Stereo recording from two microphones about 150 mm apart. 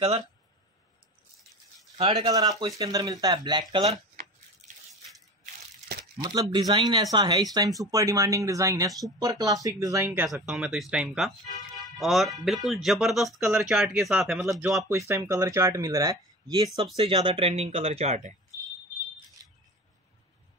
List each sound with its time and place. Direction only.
2.0 s speech: 25° right (ahead or behind)
3.7 s speech: 40° right (ahead or behind)
6.1 s speech: 30° right (ahead or behind); by 14.9 s centre (ahead or behind)
14.9 s speech: 20° right (ahead or behind)
16.7 s speech: 40° right (ahead or behind)